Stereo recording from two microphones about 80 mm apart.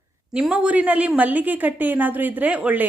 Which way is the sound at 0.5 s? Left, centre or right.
Centre.